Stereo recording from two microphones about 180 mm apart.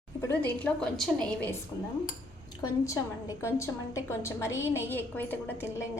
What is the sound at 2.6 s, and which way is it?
A woman's voice, 20° left (ahead or behind).